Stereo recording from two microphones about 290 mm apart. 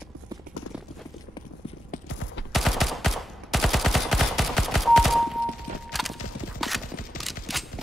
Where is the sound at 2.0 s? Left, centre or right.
Left.